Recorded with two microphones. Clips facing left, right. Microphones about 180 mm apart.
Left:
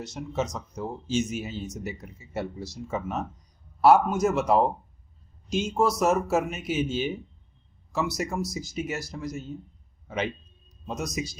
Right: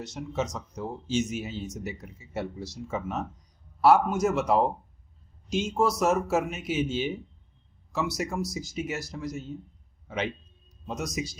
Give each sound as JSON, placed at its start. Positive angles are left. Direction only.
{"t": 0.0, "sound": "speech", "side_deg": 40}
{"t": 10.8, "sound": "speech", "side_deg": 45}